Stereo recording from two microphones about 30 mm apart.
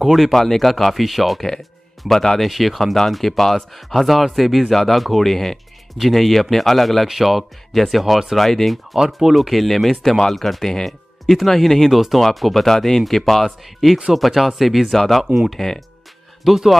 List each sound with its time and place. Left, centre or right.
0.1 s speech: centre
1.6 s speech: centre
8.4 s speech: centre
8.9 s speech: centre
9.3 s speech: centre
11.9 s speech: centre
12.6 s speech: centre
16.4 s speech: centre